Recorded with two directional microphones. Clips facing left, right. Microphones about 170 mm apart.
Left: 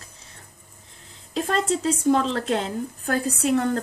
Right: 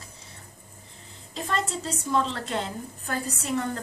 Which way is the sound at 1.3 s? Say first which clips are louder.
Left 6 dB; 65° left (ahead or behind).